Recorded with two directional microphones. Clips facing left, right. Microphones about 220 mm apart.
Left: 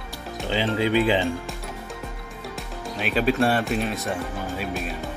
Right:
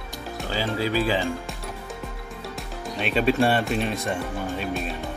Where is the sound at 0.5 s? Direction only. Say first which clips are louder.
Left 3 dB; 20° left (ahead or behind).